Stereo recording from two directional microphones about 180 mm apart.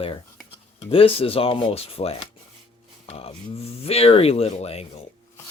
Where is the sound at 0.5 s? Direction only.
30° left (ahead or behind).